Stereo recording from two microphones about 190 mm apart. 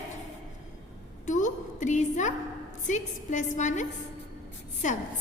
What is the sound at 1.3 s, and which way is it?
A woman's voice, 40° left (ahead or behind).